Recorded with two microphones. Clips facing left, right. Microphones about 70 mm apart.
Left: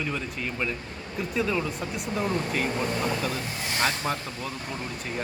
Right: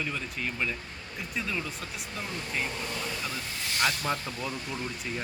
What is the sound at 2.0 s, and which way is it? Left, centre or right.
Speech, left.